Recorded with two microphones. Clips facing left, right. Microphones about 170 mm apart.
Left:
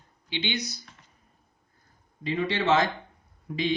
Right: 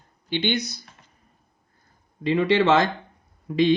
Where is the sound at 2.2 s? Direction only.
75° right (ahead or behind).